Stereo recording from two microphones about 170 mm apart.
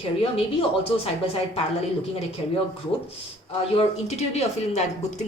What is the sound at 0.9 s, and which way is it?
Speech, 35° left (ahead or behind).